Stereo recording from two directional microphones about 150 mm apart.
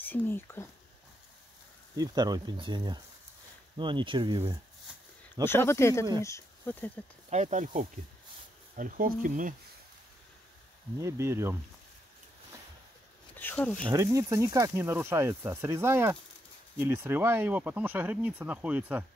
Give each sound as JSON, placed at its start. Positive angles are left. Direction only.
{"t": 0.0, "sound": "speech", "side_deg": 10}
{"t": 2.0, "sound": "speech", "side_deg": -25}
{"t": 5.4, "sound": "speech", "side_deg": 15}
{"t": 7.2, "sound": "speech", "side_deg": -50}
{"t": 8.7, "sound": "speech", "side_deg": -65}
{"t": 11.0, "sound": "speech", "side_deg": -20}
{"t": 13.4, "sound": "speech", "side_deg": 10}
{"t": 13.9, "sound": "speech", "side_deg": -20}